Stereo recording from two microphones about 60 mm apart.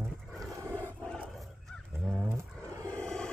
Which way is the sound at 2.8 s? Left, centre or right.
Centre.